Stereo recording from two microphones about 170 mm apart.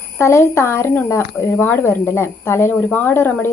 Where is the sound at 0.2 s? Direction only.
15° left (ahead or behind).